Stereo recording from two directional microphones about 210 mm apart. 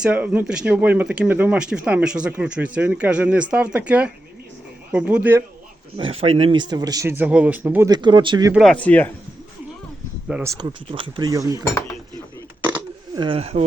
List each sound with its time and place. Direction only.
0.0 s speech: 5° right (ahead or behind)
6.0 s speech: 25° right (ahead or behind); by 7.9 s 10° right (ahead or behind)
7.9 s speech: 20° right (ahead or behind)
8.5 s speech: 5° left (ahead or behind)
10.2 s speech: 10° right (ahead or behind)
13.1 s speech: 25° right (ahead or behind)